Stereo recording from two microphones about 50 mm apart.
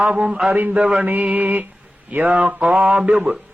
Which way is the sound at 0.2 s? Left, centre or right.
Centre.